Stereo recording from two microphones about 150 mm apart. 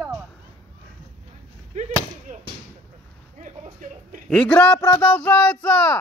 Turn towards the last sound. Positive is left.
turn(degrees=5)  # may be behind; listen again after turning